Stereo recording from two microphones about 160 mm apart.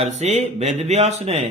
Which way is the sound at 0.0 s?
45° right (ahead or behind).